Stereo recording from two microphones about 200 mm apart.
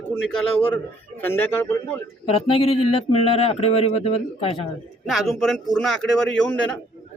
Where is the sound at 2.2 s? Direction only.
30° left (ahead or behind).